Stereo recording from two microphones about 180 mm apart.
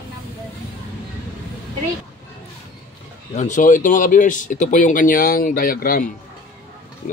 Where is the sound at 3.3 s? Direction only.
45° left (ahead or behind).